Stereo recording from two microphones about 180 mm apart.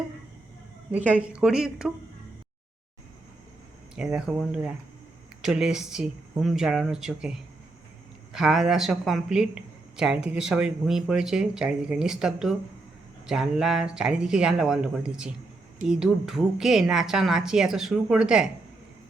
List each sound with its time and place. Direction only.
0.9 s speech: 10° right (ahead or behind)
3.9 s speech: 5° right (ahead or behind)